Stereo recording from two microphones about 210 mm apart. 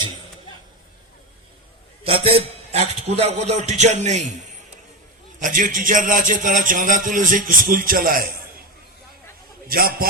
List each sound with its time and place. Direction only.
2.0 s a man's voice: 25° right (ahead or behind)
5.4 s a man's voice: 40° right (ahead or behind)
9.6 s a man's voice: 45° right (ahead or behind)